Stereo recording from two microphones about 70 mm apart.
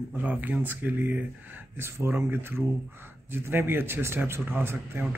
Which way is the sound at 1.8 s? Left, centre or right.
Right.